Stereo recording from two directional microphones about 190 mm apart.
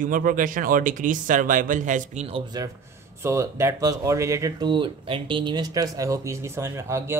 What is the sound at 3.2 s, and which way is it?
Speech, 15° right (ahead or behind).